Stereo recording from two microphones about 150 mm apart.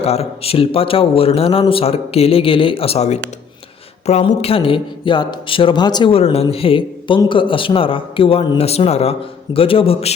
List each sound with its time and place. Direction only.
0.0 s speech: 45° left (ahead or behind)